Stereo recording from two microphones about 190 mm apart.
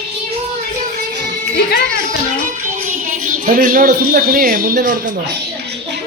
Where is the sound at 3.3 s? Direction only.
45° right (ahead or behind).